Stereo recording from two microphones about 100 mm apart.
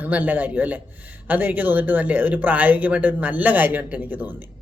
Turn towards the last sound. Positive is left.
turn(degrees=-20)  # may be behind; listen again after turning